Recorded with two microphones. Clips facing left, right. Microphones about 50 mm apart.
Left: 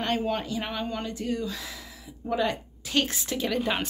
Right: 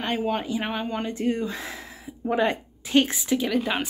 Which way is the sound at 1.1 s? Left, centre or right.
Right.